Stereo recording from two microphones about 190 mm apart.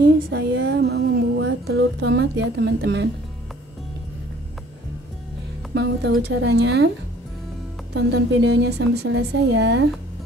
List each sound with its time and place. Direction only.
0.0 s music: 60° right (ahead or behind)
5.8 s a woman's voice: 65° right (ahead or behind)
7.9 s a woman's voice: 65° right (ahead or behind)